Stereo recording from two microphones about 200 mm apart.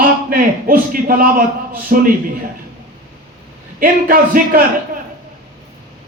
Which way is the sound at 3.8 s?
45° right (ahead or behind).